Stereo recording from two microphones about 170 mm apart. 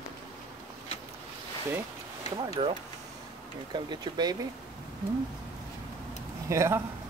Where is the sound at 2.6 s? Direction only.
30° right (ahead or behind).